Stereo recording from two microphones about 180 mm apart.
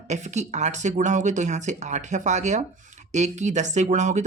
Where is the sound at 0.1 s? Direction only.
40° right (ahead or behind).